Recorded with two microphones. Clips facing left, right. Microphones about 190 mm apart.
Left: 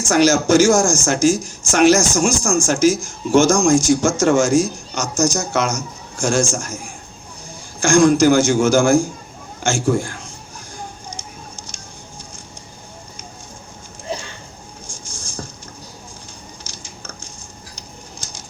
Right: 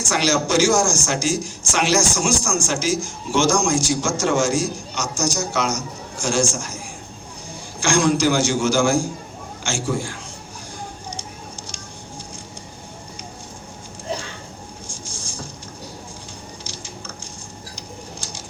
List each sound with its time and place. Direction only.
0.1 s speech: 45° left (ahead or behind)